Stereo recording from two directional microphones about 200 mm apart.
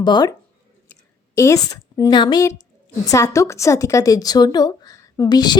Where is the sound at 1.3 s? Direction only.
15° left (ahead or behind).